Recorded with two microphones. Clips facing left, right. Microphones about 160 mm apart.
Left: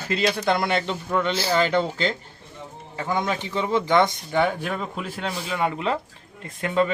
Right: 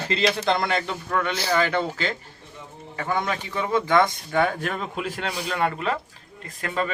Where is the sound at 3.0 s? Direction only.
20° left (ahead or behind).